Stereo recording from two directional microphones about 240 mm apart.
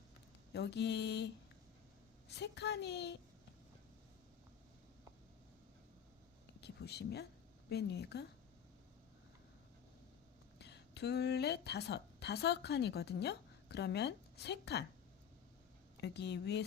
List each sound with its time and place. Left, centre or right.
0.5 s a woman's voice: left
2.3 s a woman's voice: left
6.6 s a woman's voice: left
10.6 s a woman's voice: left
16.0 s a woman's voice: left